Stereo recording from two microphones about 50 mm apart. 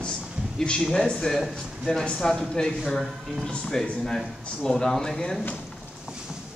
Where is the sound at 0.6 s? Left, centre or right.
Centre.